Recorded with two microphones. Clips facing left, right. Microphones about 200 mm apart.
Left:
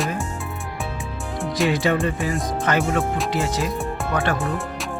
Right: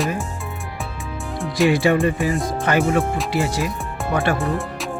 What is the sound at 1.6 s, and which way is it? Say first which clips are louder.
Speech: right 5 dB; 10° right (ahead or behind).